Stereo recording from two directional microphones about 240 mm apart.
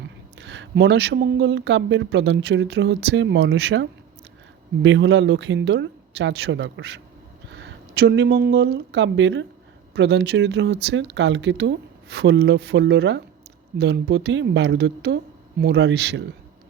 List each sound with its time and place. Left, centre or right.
0.0 s speech: right